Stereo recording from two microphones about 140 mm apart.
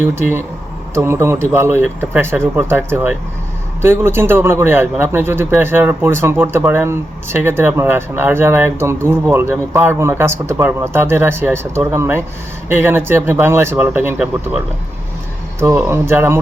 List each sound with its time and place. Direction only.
0.0 s a man's voice: 15° right (ahead or behind)
15.6 s a man's voice: 20° right (ahead or behind)